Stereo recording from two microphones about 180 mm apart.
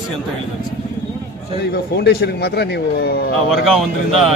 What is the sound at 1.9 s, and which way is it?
Speech, 65° left (ahead or behind).